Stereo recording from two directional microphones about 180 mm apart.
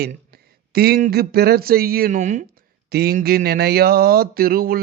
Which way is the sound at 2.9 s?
60° right (ahead or behind).